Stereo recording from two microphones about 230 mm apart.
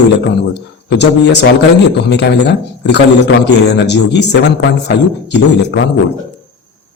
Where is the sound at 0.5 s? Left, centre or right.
Left.